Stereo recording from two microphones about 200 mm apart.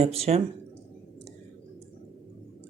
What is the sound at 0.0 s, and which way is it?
Speech, 30° right (ahead or behind).